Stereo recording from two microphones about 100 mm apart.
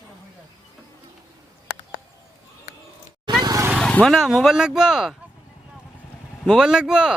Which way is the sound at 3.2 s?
40° right (ahead or behind).